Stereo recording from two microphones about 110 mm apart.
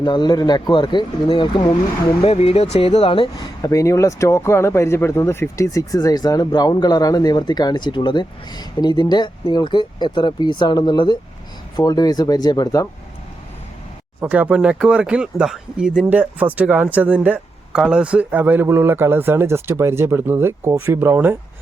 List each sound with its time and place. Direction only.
0.0 s speech: 40° left (ahead or behind)
2.2 s speech: 65° left (ahead or behind)
3.4 s speech: 35° left (ahead or behind)
11.8 s speech: 35° left (ahead or behind)
14.2 s speech: 15° right (ahead or behind)